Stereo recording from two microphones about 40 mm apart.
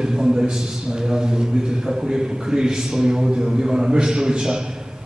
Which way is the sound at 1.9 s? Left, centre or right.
Centre.